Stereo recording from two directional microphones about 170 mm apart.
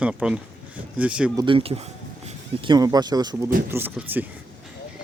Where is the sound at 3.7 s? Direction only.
10° right (ahead or behind).